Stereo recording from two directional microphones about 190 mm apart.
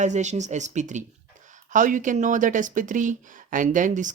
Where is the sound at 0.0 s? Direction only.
40° right (ahead or behind).